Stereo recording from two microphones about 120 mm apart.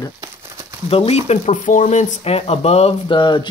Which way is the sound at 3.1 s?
40° left (ahead or behind).